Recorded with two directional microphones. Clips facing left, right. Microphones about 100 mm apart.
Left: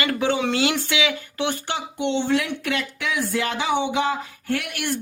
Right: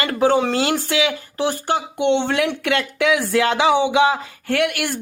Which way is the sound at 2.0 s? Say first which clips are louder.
Right 3 dB; 65° right (ahead or behind).